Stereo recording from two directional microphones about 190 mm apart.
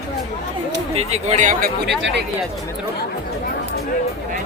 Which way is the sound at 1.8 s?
60° right (ahead or behind).